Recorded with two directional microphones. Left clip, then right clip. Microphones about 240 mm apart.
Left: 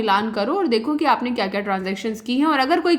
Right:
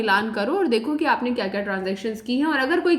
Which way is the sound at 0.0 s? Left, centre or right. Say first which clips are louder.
Left 1 dB; left.